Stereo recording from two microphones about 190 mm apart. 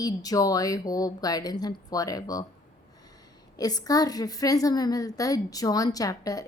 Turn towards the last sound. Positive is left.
turn(degrees=20)  # may be behind; listen again after turning